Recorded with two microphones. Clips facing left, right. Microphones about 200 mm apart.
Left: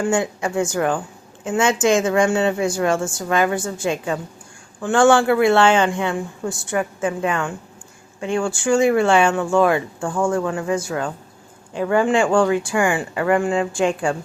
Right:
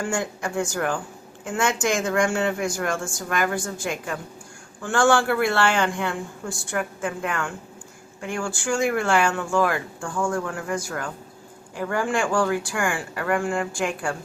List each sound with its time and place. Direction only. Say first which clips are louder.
0.0 s speech: left 6 dB; 20° left (ahead or behind)